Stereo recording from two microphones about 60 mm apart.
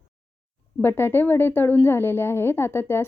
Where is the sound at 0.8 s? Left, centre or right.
Left.